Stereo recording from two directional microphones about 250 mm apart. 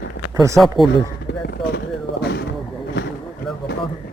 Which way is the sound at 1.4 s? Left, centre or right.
Left.